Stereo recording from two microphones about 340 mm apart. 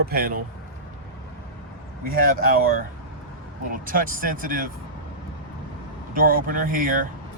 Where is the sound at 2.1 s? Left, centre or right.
Right.